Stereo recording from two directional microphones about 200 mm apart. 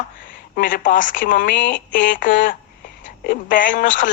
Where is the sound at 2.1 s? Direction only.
40° left (ahead or behind).